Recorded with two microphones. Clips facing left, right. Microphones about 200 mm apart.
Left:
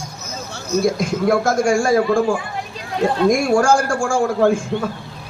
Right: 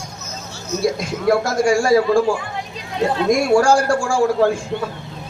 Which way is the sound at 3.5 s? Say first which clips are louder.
Right 1 dB; 50° left (ahead or behind).